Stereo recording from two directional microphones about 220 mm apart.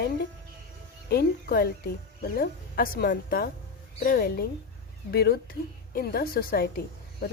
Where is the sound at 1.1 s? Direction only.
45° left (ahead or behind).